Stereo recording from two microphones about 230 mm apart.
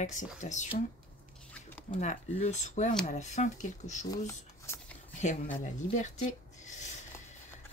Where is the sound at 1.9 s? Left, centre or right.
Left.